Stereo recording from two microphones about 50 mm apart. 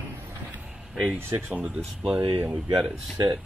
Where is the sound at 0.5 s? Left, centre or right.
Right.